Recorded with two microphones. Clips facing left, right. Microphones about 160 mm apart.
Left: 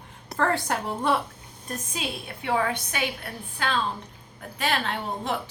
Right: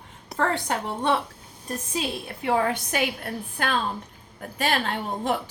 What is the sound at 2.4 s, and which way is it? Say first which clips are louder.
A woman's voice: right 2 dB; 40° right (ahead or behind).